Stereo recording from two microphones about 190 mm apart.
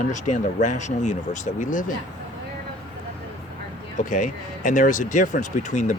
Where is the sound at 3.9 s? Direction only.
40° left (ahead or behind).